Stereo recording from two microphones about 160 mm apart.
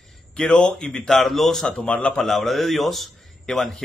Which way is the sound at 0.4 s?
5° left (ahead or behind).